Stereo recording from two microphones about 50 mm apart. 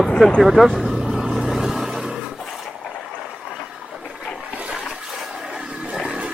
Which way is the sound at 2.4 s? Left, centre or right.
Centre.